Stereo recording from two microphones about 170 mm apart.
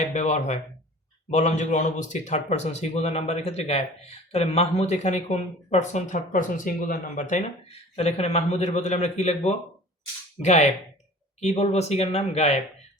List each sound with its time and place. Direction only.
0.0 s speech: 45° left (ahead or behind)